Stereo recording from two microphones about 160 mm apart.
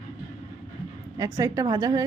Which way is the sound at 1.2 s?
20° right (ahead or behind).